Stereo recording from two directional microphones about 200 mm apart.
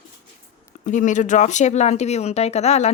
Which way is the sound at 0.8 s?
40° left (ahead or behind).